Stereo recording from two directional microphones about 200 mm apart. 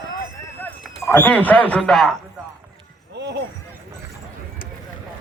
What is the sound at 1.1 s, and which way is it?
Speech, 10° left (ahead or behind).